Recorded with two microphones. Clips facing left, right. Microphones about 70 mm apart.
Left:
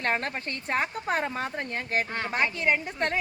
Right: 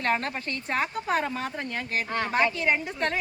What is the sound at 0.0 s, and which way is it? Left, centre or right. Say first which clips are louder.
Speech: right 1 dB; left.